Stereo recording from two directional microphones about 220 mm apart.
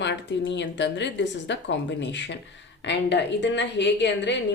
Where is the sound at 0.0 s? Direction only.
55° left (ahead or behind).